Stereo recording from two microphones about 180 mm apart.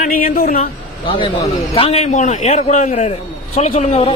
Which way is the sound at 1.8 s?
35° left (ahead or behind).